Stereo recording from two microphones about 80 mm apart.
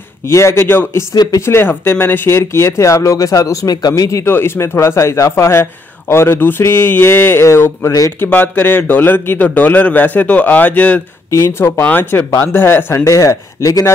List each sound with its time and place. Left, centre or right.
0.3 s speech: left
1.1 s speech: left
1.4 s speech: left
4.3 s speech: left
8.2 s a man's voice: left
11.2 s a man's voice: left
13.0 s speech: left